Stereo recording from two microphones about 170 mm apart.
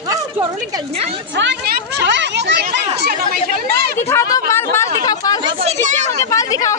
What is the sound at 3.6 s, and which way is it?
Speech, 70° right (ahead or behind).